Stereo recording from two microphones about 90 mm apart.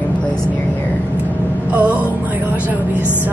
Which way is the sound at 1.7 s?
15° right (ahead or behind).